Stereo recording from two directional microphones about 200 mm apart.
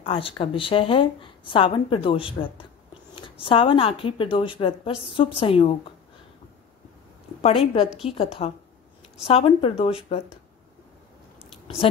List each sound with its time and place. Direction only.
0.0 s a woman's voice: 25° left (ahead or behind)
7.4 s a woman's voice: 25° left (ahead or behind)
11.6 s a sound: 30° left (ahead or behind)